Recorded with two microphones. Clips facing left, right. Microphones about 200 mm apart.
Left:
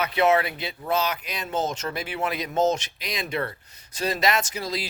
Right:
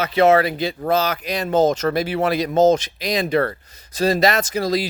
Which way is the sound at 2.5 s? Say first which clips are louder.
Right 8 dB; 90° right.